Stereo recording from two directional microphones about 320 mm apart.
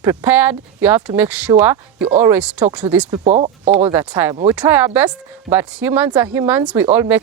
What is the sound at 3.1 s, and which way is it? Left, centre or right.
Speech, centre.